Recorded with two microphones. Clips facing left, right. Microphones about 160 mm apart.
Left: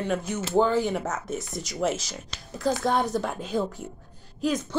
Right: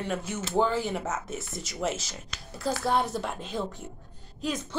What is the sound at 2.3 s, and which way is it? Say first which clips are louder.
Speech: left 1 dB; 30° left (ahead or behind).